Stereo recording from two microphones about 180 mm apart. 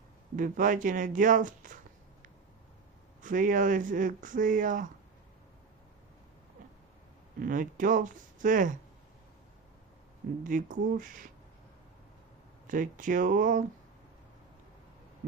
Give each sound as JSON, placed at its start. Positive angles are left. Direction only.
{"t": 0.3, "sound": "speech", "side_deg": -50}
{"t": 3.2, "sound": "speech", "side_deg": -50}
{"t": 7.3, "sound": "speech", "side_deg": -50}
{"t": 10.4, "sound": "speech", "side_deg": -45}
{"t": 12.6, "sound": "speech", "side_deg": -45}
{"t": 15.2, "sound": "heart sounds", "side_deg": -55}